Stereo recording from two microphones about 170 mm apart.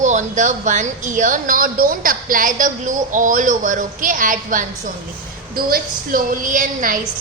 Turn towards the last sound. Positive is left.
turn(degrees=-50)  # may be behind; listen again after turning